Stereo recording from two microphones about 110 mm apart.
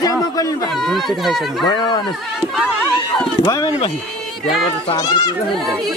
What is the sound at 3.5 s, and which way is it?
Speech, 35° left (ahead or behind).